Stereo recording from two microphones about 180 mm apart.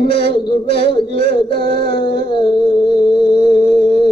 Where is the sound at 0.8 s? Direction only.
30° left (ahead or behind).